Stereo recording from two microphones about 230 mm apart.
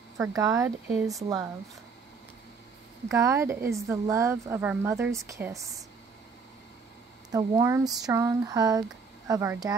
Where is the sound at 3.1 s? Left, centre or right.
Centre.